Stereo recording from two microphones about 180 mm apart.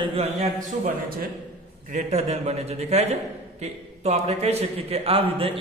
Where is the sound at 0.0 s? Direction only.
30° right (ahead or behind).